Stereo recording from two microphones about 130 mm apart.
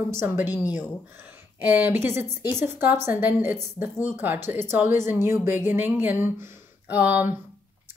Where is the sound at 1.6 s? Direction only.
15° right (ahead or behind).